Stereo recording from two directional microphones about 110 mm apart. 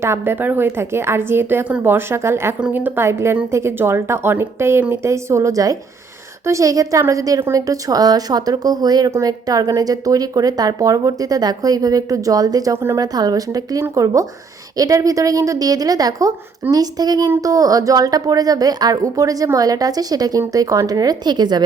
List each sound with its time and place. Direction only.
0.0 s a woman's voice: 20° right (ahead or behind)
13.1 s a woman's voice: 35° right (ahead or behind)